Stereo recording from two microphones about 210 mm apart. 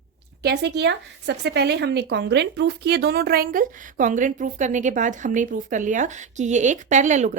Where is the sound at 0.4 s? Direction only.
50° right (ahead or behind).